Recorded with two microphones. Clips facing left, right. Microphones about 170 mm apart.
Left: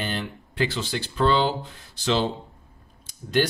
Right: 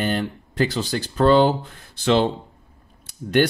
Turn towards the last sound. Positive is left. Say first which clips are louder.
# right 4 dB
turn(degrees=-60)  # may be behind; listen again after turning